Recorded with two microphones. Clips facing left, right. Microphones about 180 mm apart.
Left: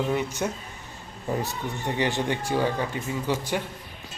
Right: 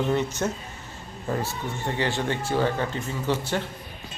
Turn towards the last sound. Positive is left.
turn(degrees=10)  # may be behind; listen again after turning